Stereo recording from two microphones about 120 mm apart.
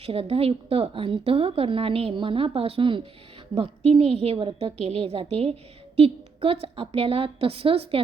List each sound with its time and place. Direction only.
0.0 s a woman's voice: 55° right (ahead or behind)